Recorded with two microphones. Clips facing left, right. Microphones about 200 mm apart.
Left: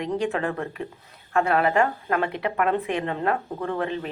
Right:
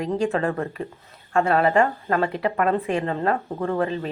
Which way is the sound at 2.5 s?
Centre (ahead or behind).